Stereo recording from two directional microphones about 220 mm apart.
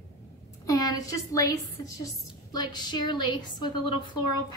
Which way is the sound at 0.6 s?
15° left (ahead or behind).